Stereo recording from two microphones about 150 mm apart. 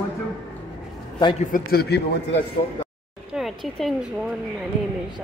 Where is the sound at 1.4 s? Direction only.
80° left.